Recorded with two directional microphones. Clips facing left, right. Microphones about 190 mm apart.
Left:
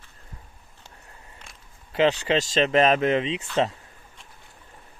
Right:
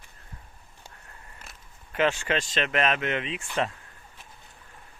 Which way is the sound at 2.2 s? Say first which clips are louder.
Left 6 dB; 25° left (ahead or behind).